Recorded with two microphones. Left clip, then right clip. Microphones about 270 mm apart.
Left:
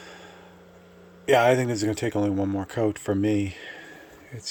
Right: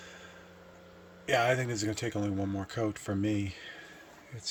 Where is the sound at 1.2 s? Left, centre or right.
Centre.